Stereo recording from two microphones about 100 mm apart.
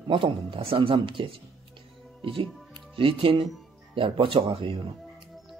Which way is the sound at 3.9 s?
60° right (ahead or behind).